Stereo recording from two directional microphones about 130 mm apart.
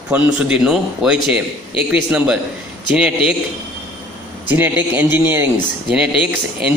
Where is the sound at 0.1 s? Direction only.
10° right (ahead or behind).